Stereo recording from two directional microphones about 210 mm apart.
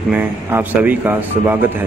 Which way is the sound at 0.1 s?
10° right (ahead or behind).